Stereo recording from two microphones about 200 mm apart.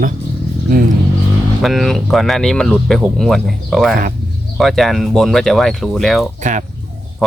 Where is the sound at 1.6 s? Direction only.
Centre (ahead or behind).